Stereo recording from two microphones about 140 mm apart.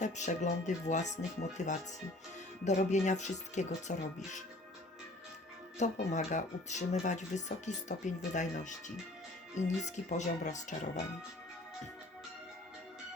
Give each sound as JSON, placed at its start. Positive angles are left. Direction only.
{"t": 0.0, "sound": "speech", "side_deg": 60}
{"t": 5.8, "sound": "speech", "side_deg": 60}